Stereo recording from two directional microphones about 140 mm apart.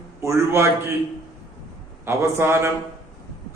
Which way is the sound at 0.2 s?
20° right (ahead or behind).